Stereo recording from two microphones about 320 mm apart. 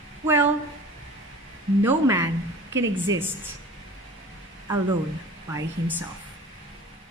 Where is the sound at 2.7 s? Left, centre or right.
Right.